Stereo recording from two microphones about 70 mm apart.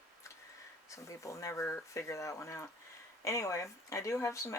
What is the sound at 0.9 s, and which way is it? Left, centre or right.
Speech, left.